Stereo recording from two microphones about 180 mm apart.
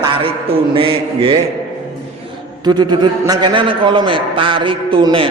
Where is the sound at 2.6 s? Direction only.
25° right (ahead or behind).